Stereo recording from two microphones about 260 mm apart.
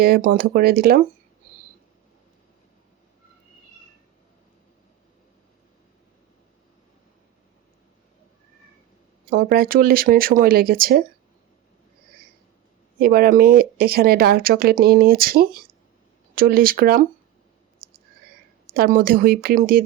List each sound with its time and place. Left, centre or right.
0.0 s speech: right
9.3 s speech: right
13.0 s speech: right
18.6 s speech: right